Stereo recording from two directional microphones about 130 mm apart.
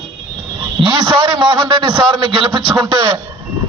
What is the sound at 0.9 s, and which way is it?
A man's voice, 25° right (ahead or behind).